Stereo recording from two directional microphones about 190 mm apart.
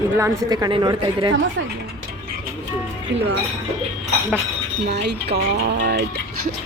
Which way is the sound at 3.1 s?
70° right (ahead or behind).